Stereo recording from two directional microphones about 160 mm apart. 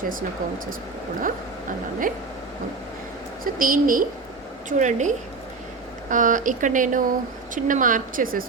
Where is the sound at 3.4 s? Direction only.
60° right (ahead or behind).